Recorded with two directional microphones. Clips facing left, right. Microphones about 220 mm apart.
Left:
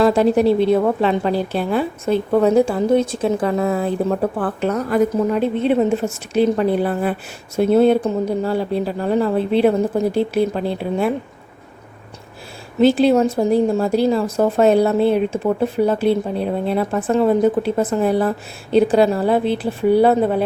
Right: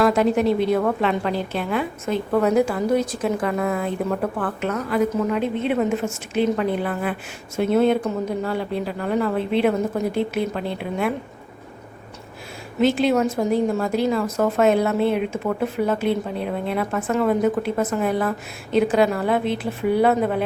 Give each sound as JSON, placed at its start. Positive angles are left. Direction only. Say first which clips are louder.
{"t": 0.0, "sound": "a woman's voice", "louder": "left 4 dB", "side_deg": 30}
{"t": 12.8, "sound": "a woman's voice", "louder": "left 5 dB", "side_deg": 35}